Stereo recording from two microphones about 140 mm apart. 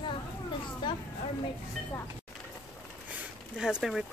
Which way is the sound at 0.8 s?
35° left (ahead or behind).